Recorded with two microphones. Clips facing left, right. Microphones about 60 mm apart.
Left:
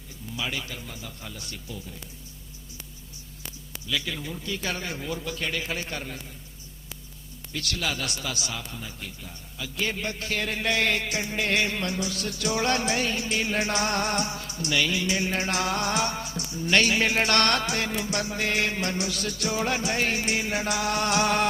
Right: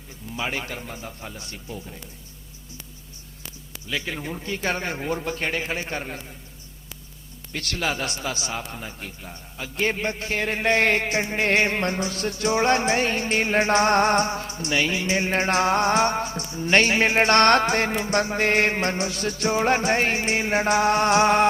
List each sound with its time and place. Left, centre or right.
0.3 s a man's voice: right
3.8 s a man's voice: right
7.5 s a man's voice: right